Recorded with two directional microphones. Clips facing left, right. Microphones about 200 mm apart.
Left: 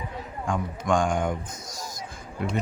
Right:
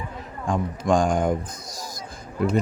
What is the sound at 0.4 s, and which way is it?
Speech, 35° right (ahead or behind).